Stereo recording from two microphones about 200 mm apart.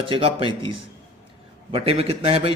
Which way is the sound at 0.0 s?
25° right (ahead or behind).